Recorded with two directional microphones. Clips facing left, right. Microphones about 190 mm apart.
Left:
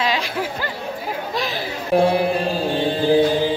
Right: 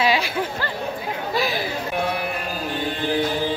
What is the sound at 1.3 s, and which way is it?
Chatter, 5° right (ahead or behind).